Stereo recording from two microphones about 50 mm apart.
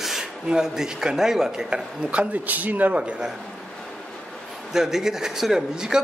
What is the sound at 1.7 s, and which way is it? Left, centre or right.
Speech, right.